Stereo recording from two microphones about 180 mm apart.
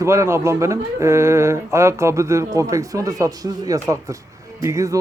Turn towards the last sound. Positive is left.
turn(degrees=-15)  # may be behind; listen again after turning